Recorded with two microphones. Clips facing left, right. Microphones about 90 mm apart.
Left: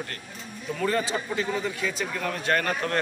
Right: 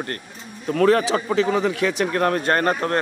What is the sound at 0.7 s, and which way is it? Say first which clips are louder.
Speech: right 9 dB; 70° right (ahead or behind).